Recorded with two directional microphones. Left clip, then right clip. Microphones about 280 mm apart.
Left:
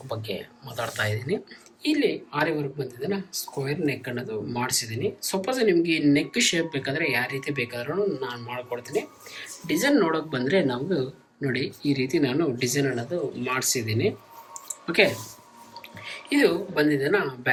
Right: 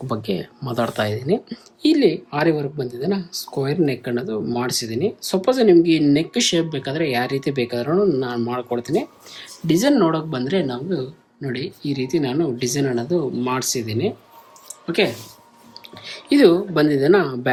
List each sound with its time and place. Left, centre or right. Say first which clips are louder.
0.1 s speech: right 6 dB; right; by 15.1 s centre
16.3 s speech: right 8 dB; centre